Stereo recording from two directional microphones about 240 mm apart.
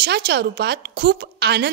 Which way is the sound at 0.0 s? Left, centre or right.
Right.